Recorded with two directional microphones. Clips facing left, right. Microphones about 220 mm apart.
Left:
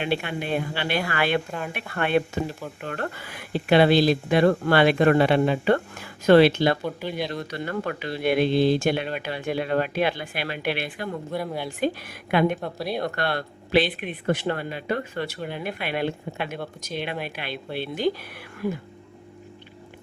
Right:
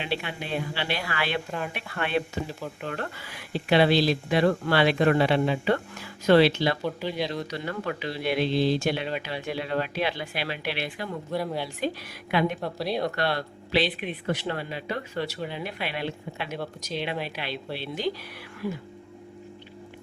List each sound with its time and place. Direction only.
0.0 s speech: 50° left (ahead or behind)
1.5 s a woman's voice: centre (ahead or behind)
1.7 s speech: 50° left (ahead or behind)
11.3 s a woman's voice: centre (ahead or behind)
11.8 s speech: 50° left (ahead or behind)
12.5 s a woman's voice: centre (ahead or behind)
13.1 s speech: 50° left (ahead or behind)